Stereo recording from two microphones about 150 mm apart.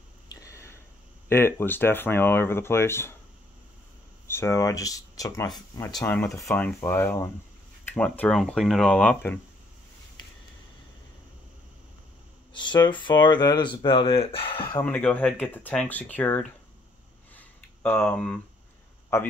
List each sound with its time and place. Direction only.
0.3 s a sound: 20° left (ahead or behind)
1.3 s speech: 15° left (ahead or behind)
4.3 s speech: 20° left (ahead or behind)
12.5 s speech: 30° left (ahead or behind)
14.8 s speech: 10° left (ahead or behind)
17.3 s a sound: 10° left (ahead or behind)
19.1 s speech: 15° left (ahead or behind)